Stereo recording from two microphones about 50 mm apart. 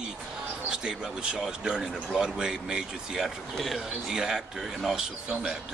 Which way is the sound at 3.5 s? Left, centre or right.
Centre.